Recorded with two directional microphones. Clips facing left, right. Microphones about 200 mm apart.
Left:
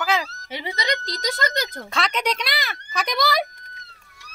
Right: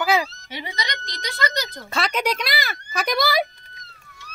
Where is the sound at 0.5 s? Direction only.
25° left (ahead or behind); by 1.7 s 50° left (ahead or behind).